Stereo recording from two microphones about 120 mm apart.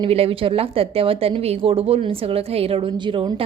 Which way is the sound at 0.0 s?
55° right (ahead or behind).